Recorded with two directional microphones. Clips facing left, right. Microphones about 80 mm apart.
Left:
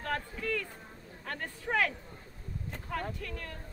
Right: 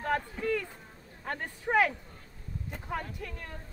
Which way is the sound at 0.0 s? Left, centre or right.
Centre.